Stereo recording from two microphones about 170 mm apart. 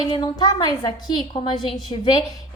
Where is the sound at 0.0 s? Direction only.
25° left (ahead or behind).